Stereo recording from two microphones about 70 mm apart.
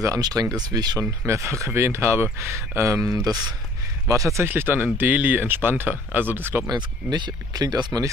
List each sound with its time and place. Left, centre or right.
0.2 s speech: right
0.6 s speech: right
1.2 s speech: right
4.5 s speech: right
6.7 s speech: right